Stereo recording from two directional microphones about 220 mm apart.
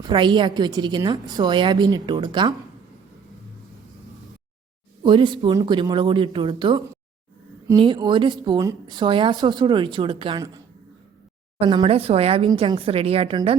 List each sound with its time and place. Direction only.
0.0 s a woman's voice: 20° right (ahead or behind)
5.0 s a woman's voice: 20° right (ahead or behind)
11.6 s a woman's voice: 25° right (ahead or behind)